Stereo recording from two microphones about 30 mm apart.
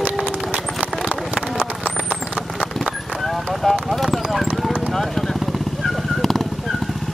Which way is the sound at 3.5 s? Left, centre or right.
Centre.